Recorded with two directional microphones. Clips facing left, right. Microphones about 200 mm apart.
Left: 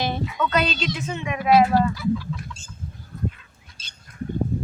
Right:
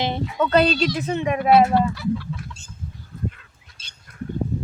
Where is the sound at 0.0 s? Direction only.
25° right (ahead or behind).